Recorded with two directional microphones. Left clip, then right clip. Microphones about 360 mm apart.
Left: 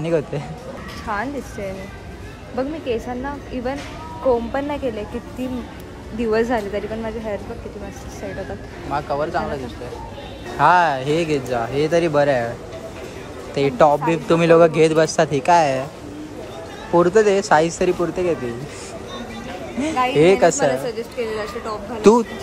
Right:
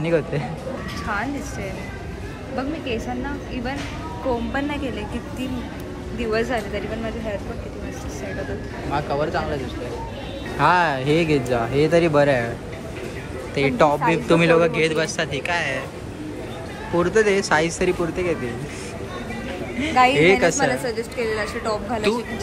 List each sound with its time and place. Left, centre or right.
0.0 s a woman's voice: centre
2.9 s speech: left
4.3 s speech: left
6.1 s speech: left
8.9 s a woman's voice: centre
10.6 s speech: centre
13.6 s a woman's voice: centre
16.9 s a woman's voice: centre
19.8 s a woman's voice: centre